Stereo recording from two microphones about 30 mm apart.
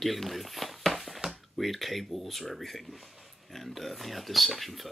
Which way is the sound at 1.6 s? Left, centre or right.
Centre.